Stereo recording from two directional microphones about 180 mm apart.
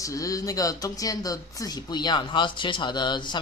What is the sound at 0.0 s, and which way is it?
Speech, 20° left (ahead or behind).